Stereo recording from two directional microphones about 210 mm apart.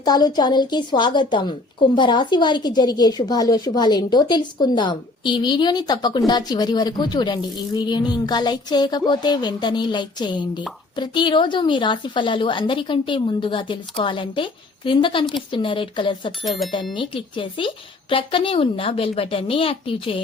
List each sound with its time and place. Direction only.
0.0 s a woman's voice: 20° left (ahead or behind)